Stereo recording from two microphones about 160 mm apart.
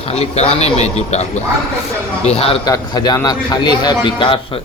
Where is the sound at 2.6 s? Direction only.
25° left (ahead or behind).